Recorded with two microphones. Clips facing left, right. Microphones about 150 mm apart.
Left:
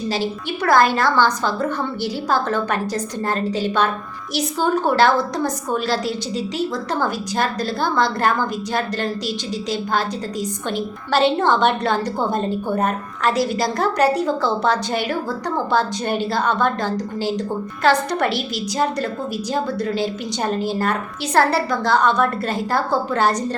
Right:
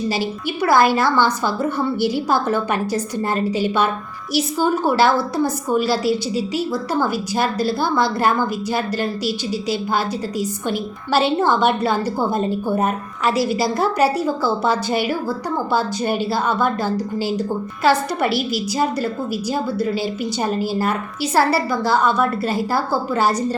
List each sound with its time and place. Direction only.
0.1 s a woman's voice: 10° right (ahead or behind)